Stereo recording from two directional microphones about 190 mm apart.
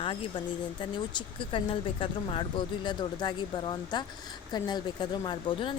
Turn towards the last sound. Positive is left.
turn(degrees=25)  # may be behind; listen again after turning